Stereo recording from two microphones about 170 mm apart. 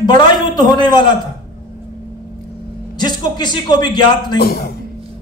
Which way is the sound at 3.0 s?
25° left (ahead or behind).